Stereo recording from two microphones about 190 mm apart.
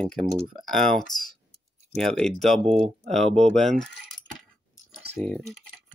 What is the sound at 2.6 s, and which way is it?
Speech, 30° right (ahead or behind).